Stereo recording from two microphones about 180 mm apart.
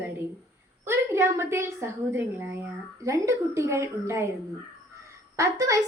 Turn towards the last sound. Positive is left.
turn(degrees=-15)  # may be behind; listen again after turning